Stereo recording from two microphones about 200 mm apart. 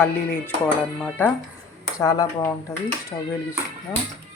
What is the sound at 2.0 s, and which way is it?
Speech, 15° left (ahead or behind).